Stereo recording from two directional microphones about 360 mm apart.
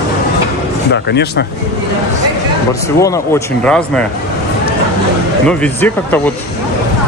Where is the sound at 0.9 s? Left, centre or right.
Left.